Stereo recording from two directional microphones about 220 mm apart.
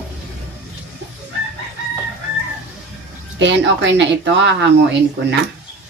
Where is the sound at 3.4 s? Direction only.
55° right (ahead or behind).